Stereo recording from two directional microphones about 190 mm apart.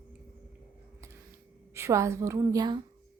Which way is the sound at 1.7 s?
15° right (ahead or behind).